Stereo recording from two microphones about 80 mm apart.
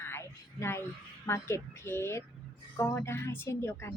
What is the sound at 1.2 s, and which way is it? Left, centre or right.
Speech, left.